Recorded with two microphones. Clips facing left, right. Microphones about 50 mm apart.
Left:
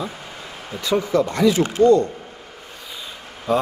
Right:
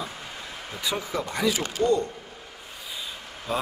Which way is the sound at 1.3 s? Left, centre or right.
Centre.